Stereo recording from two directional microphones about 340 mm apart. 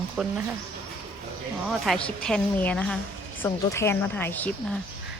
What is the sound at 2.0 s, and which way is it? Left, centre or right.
A woman's voice, centre.